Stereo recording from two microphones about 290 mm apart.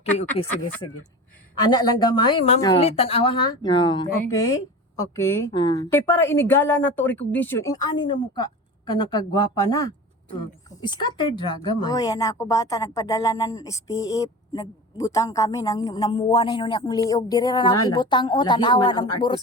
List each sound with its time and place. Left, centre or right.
0.4 s a woman's voice: centre